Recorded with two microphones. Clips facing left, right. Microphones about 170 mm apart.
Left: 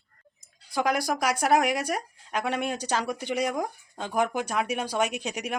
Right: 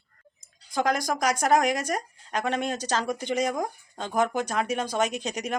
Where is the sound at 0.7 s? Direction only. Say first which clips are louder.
Even; 10° left (ahead or behind).